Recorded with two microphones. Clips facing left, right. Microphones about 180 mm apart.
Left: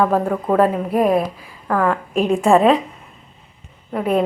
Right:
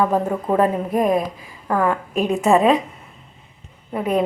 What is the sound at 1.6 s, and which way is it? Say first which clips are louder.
A woman's voice: left 1 dB; 15° right (ahead or behind).